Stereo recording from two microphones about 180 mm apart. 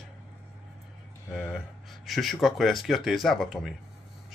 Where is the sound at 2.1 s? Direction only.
Centre (ahead or behind).